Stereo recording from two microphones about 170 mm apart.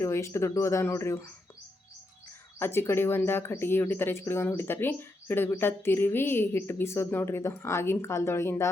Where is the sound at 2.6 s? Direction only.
15° left (ahead or behind).